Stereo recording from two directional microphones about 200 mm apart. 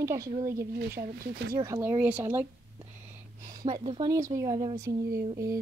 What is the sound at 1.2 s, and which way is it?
Speech, 50° right (ahead or behind).